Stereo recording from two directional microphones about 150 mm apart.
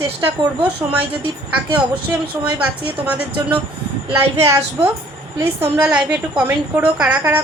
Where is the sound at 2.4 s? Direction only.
10° right (ahead or behind).